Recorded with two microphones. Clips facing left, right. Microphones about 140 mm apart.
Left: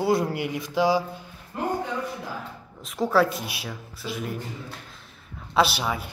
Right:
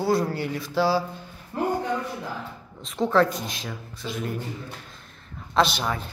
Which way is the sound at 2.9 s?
5° left (ahead or behind).